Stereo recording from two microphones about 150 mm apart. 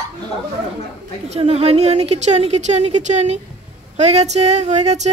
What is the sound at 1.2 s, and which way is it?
A woman's voice, 45° right (ahead or behind).